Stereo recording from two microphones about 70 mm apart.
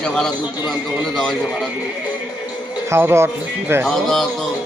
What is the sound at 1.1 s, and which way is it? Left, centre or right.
Speech, centre.